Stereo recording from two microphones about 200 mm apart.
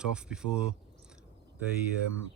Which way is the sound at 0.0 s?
5° right (ahead or behind).